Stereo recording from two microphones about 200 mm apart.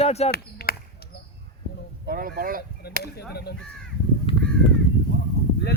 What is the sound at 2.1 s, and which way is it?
Speech, 45° right (ahead or behind).